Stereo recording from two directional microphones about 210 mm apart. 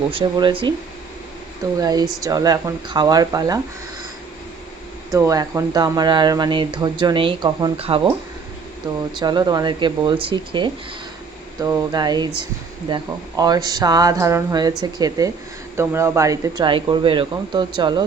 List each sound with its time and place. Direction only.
0.1 s speech: 25° right (ahead or behind)
1.8 s speech: 20° right (ahead or behind)
5.1 s speech: 15° right (ahead or behind)
9.1 s speech: 20° right (ahead or behind)